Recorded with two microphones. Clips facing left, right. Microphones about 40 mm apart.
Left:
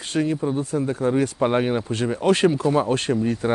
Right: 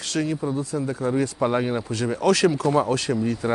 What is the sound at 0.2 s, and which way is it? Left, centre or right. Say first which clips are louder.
Speech: left 3 dB; centre.